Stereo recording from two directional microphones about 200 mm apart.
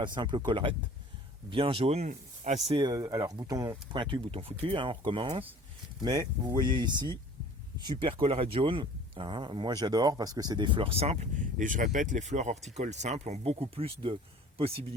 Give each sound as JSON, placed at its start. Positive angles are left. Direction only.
{"t": 0.0, "sound": "speech", "side_deg": -25}